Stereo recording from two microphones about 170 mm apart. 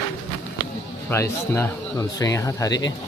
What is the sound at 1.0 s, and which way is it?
Speech, 15° left (ahead or behind).